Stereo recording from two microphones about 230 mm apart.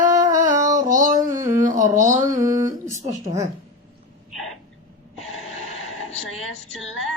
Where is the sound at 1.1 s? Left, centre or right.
Centre.